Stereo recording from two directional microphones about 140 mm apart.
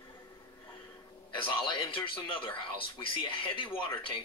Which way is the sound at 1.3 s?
35° left (ahead or behind).